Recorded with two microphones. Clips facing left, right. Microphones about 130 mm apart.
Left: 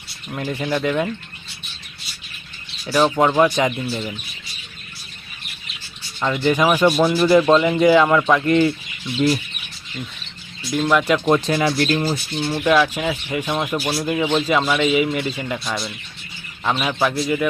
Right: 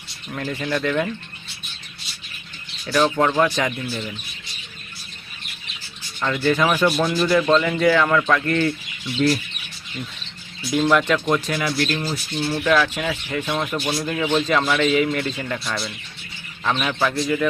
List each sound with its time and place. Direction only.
0.3 s speech: 15° left (ahead or behind)
3.0 s speech: 15° left (ahead or behind)
6.1 s speech: 15° left (ahead or behind)
7.3 s speech: 20° left (ahead or behind)
10.8 s speech: 5° left (ahead or behind)
11.3 s speech: 30° left (ahead or behind)
12.5 s speech: 15° left (ahead or behind)
15.6 s speech: centre (ahead or behind)